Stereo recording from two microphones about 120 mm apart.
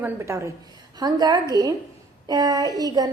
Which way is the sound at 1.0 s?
35° right (ahead or behind).